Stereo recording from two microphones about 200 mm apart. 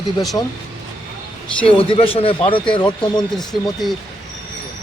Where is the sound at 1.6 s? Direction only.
25° left (ahead or behind).